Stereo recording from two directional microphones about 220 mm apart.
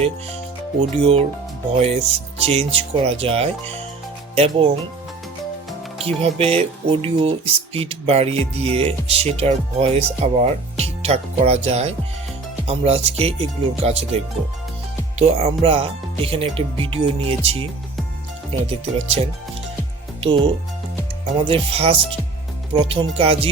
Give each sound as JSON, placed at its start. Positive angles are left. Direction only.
{"t": 0.8, "sound": "speech", "side_deg": -25}
{"t": 6.0, "sound": "speech", "side_deg": -25}
{"t": 15.2, "sound": "speech", "side_deg": -25}
{"t": 18.9, "sound": "speech", "side_deg": -25}